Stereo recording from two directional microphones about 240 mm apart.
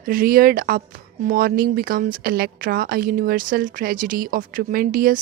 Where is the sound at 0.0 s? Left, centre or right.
Right.